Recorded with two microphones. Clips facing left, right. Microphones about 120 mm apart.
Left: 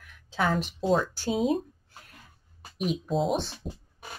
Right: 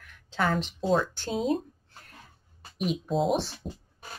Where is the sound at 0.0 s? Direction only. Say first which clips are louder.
Even; 5° left (ahead or behind).